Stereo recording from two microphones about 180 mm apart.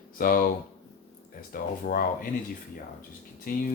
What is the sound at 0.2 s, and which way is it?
Speech, 55° left (ahead or behind).